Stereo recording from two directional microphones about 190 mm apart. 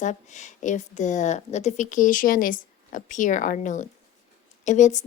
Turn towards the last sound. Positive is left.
turn(degrees=40)  # may be behind; listen again after turning